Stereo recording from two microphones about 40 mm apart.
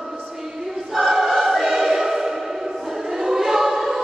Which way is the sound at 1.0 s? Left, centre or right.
Centre.